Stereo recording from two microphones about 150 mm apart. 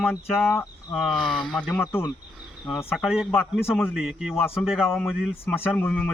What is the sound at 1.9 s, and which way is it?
Speech, 15° left (ahead or behind).